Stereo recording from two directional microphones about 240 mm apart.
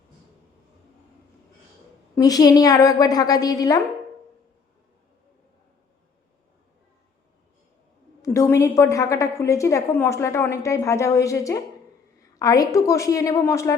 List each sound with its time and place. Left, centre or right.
2.1 s a woman's voice: centre
8.2 s a woman's voice: centre